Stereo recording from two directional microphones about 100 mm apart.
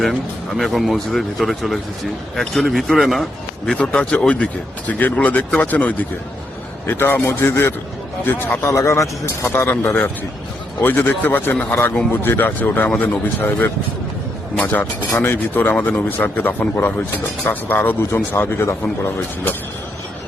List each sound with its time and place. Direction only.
0.0 s speech: centre (ahead or behind); by 19.5 s 25° left (ahead or behind)